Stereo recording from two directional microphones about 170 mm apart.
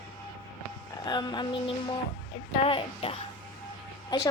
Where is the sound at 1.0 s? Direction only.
25° left (ahead or behind).